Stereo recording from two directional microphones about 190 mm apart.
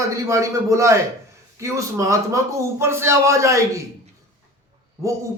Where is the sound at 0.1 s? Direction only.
15° right (ahead or behind).